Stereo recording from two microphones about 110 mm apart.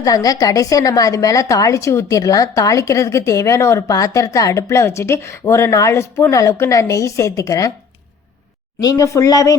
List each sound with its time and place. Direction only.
0.0 s a woman's voice: 35° left (ahead or behind)
8.8 s speech: 35° left (ahead or behind)